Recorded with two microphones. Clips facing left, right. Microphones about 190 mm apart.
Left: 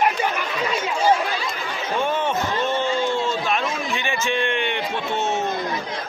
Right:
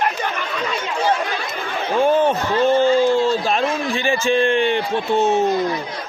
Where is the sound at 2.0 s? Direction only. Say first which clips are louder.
Right 8 dB; 35° right (ahead or behind).